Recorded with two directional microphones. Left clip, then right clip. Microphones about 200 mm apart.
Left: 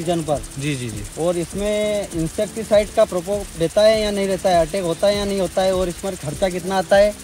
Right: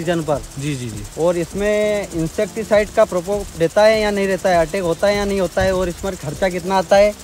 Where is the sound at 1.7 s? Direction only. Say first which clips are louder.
Right 3 dB; 25° right (ahead or behind).